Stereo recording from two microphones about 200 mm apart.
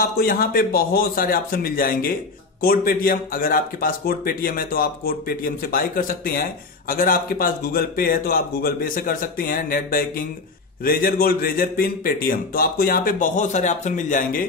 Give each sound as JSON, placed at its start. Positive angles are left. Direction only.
{"t": 0.0, "sound": "a man's voice", "side_deg": 45}